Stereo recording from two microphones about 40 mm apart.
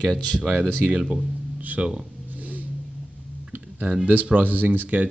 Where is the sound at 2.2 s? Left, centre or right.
Right.